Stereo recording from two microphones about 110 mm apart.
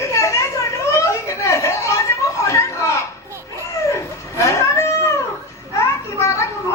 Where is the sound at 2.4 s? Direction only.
30° left (ahead or behind).